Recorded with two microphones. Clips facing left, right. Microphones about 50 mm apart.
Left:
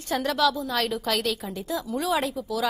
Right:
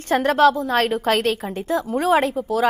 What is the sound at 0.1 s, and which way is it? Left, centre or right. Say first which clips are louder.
A woman's voice: right 8 dB; right.